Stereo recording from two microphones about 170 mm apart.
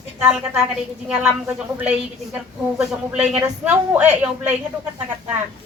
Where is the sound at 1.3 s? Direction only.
15° right (ahead or behind).